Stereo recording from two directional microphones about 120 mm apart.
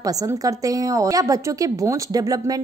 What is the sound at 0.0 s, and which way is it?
Speech, 30° right (ahead or behind).